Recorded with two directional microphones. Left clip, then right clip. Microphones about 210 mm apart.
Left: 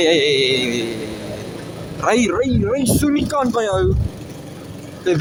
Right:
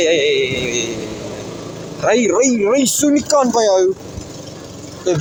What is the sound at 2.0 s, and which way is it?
Speech, 25° left (ahead or behind).